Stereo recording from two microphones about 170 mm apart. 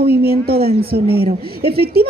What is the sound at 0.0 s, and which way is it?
A woman's voice, 65° right (ahead or behind).